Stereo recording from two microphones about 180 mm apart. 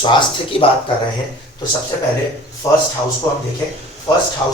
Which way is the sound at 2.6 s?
15° left (ahead or behind).